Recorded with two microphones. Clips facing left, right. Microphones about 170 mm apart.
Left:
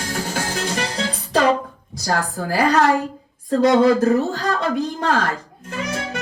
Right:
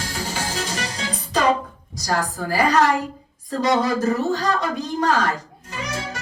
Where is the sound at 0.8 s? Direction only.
60° left (ahead or behind).